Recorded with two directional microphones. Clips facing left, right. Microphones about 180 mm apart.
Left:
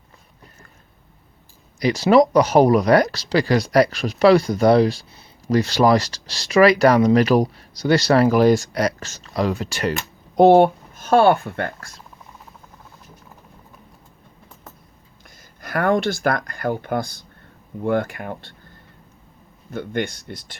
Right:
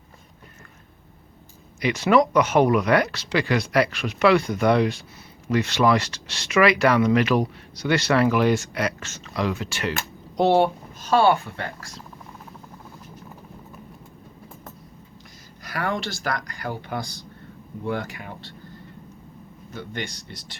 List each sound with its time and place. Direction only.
1.8 s speech: 35° left (ahead or behind)
10.3 s speech: 55° left (ahead or behind)
15.6 s speech: 50° left (ahead or behind)
19.7 s speech: 55° left (ahead or behind)